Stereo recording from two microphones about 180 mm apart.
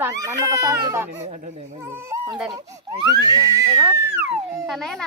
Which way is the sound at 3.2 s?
20° right (ahead or behind).